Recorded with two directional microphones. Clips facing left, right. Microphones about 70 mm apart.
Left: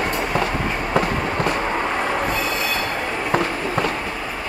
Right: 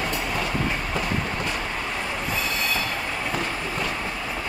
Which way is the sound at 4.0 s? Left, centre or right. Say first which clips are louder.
Left 3 dB; left.